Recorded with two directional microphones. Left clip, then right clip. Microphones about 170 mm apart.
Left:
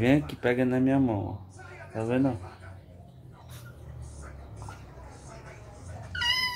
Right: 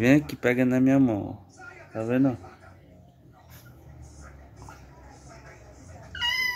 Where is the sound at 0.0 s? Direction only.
55° right (ahead or behind).